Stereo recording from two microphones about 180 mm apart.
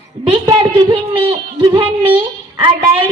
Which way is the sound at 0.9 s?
25° right (ahead or behind).